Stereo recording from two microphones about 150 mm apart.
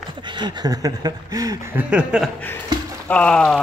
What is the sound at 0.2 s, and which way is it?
Speech, 30° right (ahead or behind).